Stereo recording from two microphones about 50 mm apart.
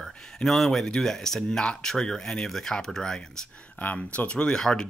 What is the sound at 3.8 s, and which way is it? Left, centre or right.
Speech, left.